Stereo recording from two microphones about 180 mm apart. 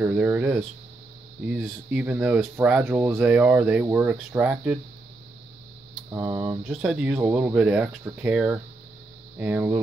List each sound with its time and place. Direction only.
0.0 s speech: 10° right (ahead or behind)
6.1 s speech: 15° right (ahead or behind)
6.7 s speech: 5° right (ahead or behind)